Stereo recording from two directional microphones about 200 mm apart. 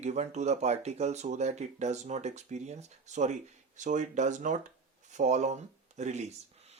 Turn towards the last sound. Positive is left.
turn(degrees=-35)  # may be behind; listen again after turning